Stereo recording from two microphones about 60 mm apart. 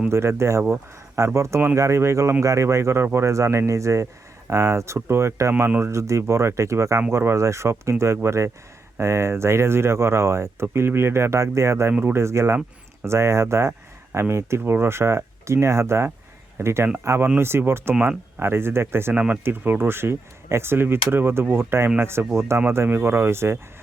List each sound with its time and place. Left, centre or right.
0.1 s speech: right
17.3 s speech: right